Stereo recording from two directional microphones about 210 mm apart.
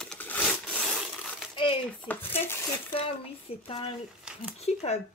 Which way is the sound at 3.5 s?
25° left (ahead or behind).